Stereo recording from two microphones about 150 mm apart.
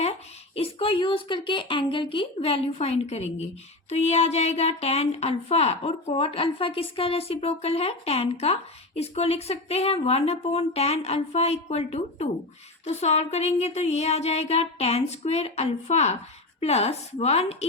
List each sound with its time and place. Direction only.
0.0 s speech: 40° left (ahead or behind)